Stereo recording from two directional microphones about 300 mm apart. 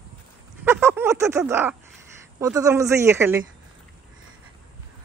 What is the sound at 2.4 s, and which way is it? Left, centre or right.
Speech, centre.